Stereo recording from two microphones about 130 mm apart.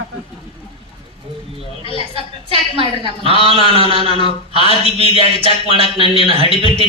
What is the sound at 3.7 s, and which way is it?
A man's voice, 45° right (ahead or behind).